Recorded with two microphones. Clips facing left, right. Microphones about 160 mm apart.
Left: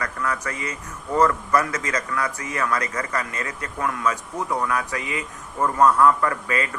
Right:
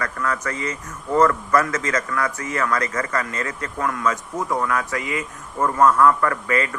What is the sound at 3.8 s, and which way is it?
A man's voice, 20° left (ahead or behind).